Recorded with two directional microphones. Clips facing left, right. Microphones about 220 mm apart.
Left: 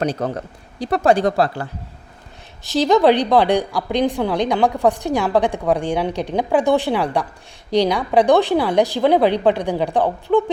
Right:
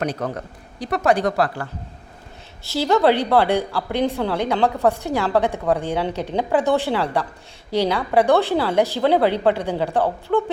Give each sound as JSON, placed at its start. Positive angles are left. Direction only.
{"t": 0.0, "sound": "speech", "side_deg": 30}
{"t": 2.6, "sound": "a woman's voice", "side_deg": 20}